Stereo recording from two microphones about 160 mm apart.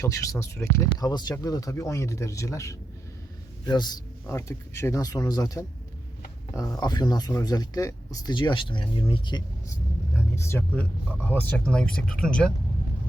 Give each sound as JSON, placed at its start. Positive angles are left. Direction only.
{"t": 0.0, "sound": "speech", "side_deg": 20}
{"t": 10.2, "sound": "speech", "side_deg": 15}